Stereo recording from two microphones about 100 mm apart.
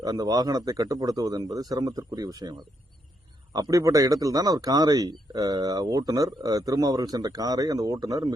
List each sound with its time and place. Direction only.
0.0 s speech: 40° right (ahead or behind)